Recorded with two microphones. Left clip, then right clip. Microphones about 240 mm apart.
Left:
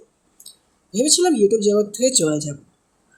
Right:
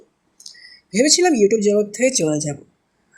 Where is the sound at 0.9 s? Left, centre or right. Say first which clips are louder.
Right 2 dB; right.